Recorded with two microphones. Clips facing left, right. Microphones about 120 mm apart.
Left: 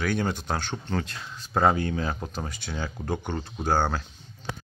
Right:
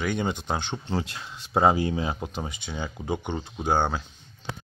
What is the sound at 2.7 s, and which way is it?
Speech, 5° right (ahead or behind).